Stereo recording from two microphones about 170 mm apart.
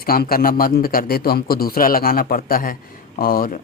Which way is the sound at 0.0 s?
60° left (ahead or behind).